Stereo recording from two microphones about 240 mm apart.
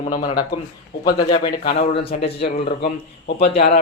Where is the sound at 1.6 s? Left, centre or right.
Left.